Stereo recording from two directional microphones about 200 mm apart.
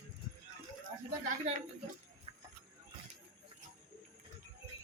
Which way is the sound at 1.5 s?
35° right (ahead or behind).